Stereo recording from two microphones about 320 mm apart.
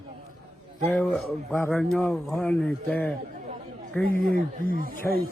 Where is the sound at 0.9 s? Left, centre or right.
Centre.